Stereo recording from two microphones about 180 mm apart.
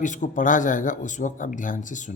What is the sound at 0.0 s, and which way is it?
Speech, 45° left (ahead or behind).